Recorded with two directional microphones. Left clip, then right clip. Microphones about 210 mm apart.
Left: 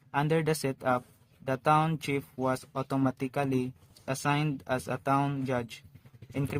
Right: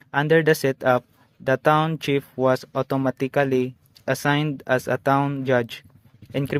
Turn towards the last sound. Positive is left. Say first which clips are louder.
# right 9 dB
turn(degrees=-30)  # may be behind; listen again after turning